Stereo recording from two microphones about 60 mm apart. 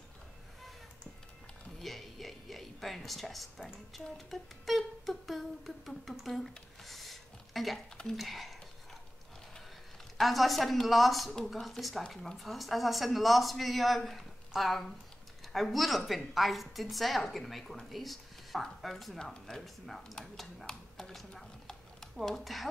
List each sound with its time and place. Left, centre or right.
1.8 s mechanisms: centre
4.3 s humming: centre
8.2 s speech: centre
10.1 s speech: centre